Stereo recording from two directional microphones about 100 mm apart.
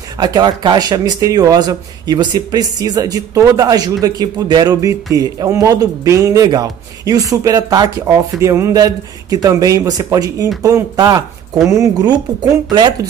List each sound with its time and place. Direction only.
0.2 s a man's voice: 45° right (ahead or behind)